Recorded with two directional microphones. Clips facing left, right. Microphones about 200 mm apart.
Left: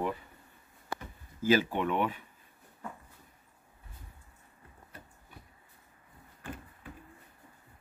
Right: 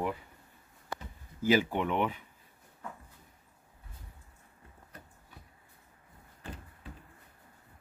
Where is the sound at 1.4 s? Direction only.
15° right (ahead or behind).